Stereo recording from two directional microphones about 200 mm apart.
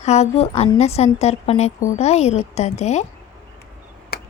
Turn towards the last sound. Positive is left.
turn(degrees=50)  # may be behind; listen again after turning